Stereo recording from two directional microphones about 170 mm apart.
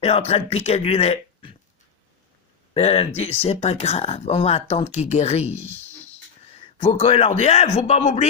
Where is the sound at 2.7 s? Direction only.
35° left (ahead or behind).